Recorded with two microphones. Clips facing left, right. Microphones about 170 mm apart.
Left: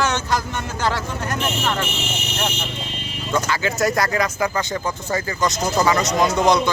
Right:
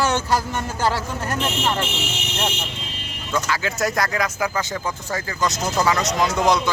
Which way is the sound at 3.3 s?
Centre (ahead or behind).